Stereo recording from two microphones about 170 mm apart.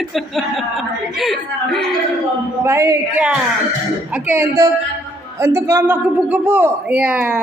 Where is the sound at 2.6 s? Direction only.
15° right (ahead or behind).